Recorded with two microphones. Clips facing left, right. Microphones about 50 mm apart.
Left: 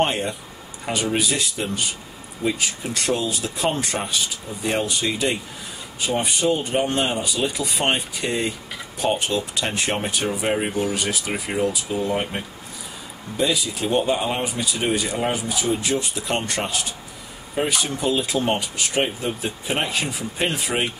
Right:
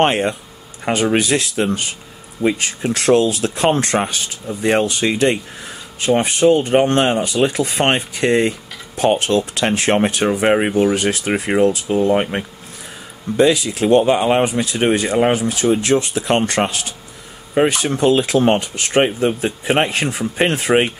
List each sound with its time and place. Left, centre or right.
0.0 s speech: right
13.4 s speech: right